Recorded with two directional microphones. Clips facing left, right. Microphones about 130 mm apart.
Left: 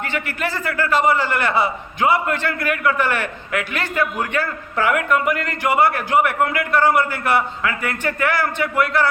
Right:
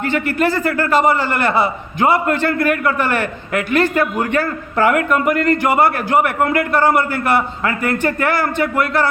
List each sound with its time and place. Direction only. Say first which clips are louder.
0.0 s a man's voice: right 8 dB; 40° right (ahead or behind)